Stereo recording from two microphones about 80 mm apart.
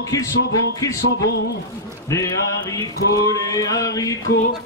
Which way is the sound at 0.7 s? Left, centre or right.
Left.